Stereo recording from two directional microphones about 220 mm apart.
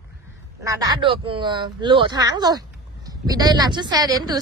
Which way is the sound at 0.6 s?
15° right (ahead or behind).